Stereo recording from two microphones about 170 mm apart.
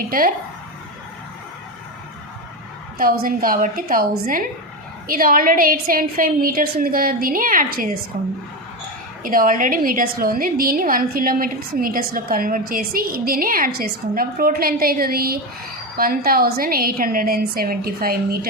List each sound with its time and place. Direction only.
3.0 s a woman's voice: 60° right (ahead or behind)